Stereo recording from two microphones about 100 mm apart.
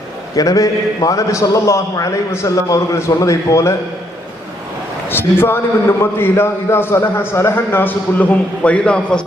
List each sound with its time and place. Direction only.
0.3 s a man's voice: 35° left (ahead or behind)
5.0 s a man's voice: 20° left (ahead or behind)